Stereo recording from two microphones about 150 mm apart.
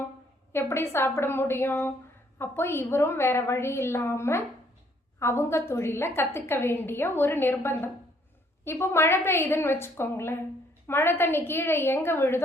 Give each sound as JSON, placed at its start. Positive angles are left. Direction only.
{"t": 0.5, "sound": "a woman's voice", "side_deg": 15}